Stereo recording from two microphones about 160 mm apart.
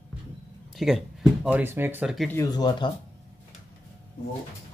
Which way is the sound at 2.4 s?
25° left (ahead or behind).